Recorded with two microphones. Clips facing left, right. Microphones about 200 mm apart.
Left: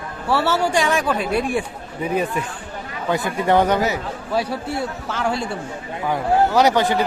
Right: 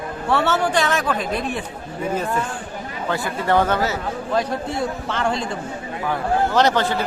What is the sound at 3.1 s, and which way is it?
A man's voice, 20° left (ahead or behind).